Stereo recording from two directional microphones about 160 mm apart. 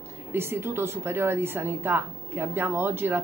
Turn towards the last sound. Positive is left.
turn(degrees=-15)  # may be behind; listen again after turning